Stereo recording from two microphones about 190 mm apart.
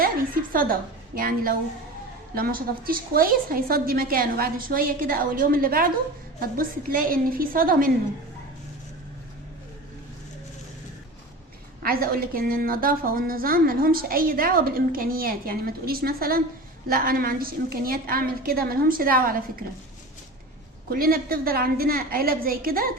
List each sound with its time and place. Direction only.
0.5 s a woman's voice: 50° right (ahead or behind)
11.8 s a woman's voice: 50° right (ahead or behind)
20.9 s a woman's voice: 50° right (ahead or behind)